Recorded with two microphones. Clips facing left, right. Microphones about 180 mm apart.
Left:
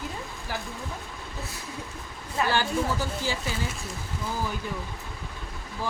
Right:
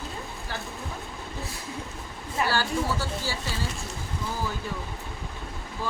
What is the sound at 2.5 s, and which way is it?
Speech, 20° left (ahead or behind).